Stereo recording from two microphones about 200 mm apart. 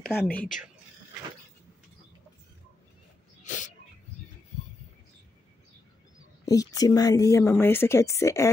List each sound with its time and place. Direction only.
0.0 s speech: 10° left (ahead or behind)
3.4 s dog: 40° left (ahead or behind)
6.4 s speech: 15° left (ahead or behind)